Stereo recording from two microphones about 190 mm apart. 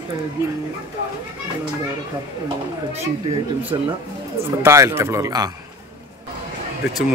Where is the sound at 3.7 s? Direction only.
20° right (ahead or behind).